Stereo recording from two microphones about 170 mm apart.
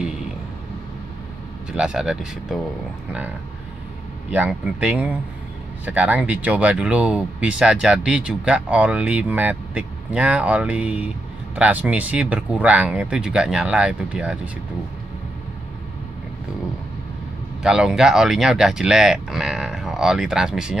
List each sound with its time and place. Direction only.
1.7 s speech: 5° right (ahead or behind)
4.3 s speech: 10° right (ahead or behind)
17.6 s speech: 5° right (ahead or behind)